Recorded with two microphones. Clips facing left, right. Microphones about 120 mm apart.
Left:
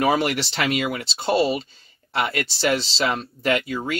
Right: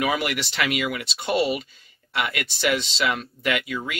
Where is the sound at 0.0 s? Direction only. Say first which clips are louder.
Left 4 dB; 35° left (ahead or behind).